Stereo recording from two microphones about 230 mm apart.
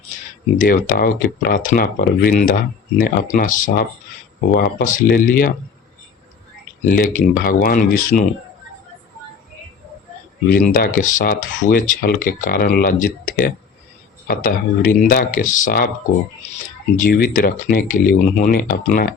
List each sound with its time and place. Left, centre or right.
0.6 s speech: left
6.8 s speech: left
10.5 s speech: left
17.0 s speech: left